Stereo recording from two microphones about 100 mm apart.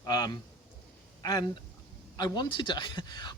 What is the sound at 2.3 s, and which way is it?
Speech, 50° left (ahead or behind).